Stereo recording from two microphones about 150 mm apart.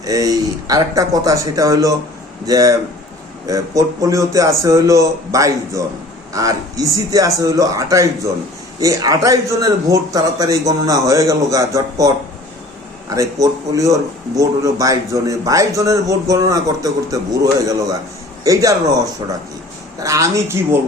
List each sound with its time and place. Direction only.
0.0 s speech: 25° right (ahead or behind)